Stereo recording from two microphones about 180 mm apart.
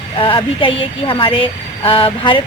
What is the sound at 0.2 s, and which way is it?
A woman's voice, 30° left (ahead or behind).